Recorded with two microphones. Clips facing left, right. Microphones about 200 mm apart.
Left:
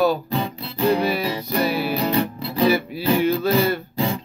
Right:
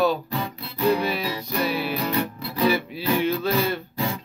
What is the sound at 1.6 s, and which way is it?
Music, 40° left (ahead or behind).